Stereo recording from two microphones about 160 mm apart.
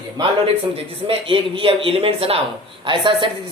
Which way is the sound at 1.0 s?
35° right (ahead or behind).